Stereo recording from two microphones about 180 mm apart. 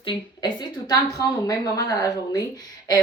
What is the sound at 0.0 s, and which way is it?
A woman's voice, 25° left (ahead or behind).